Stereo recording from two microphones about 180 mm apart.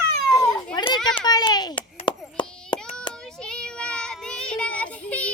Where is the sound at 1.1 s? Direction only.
25° left (ahead or behind).